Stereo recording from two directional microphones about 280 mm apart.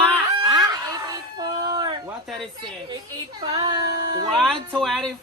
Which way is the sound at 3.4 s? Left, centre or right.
Centre.